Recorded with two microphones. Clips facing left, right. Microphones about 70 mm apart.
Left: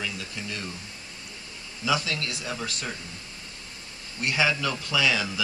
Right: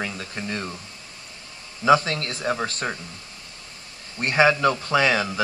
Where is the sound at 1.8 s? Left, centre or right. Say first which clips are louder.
Right 9 dB; right.